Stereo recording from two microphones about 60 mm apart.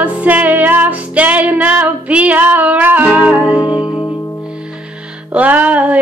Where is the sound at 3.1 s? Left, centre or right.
Centre.